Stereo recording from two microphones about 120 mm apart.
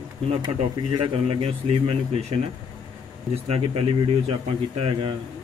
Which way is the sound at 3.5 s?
50° right (ahead or behind).